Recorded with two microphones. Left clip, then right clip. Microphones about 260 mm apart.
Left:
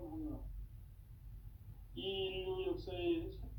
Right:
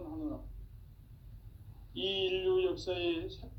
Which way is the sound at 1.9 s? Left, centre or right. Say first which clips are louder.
Right 7 dB; right.